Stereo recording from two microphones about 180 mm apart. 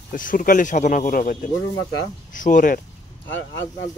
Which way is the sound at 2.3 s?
45° left (ahead or behind).